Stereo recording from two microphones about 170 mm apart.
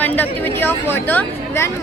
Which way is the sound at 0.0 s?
10° left (ahead or behind).